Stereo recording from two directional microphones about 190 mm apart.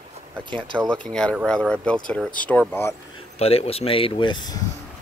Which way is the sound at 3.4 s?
30° left (ahead or behind).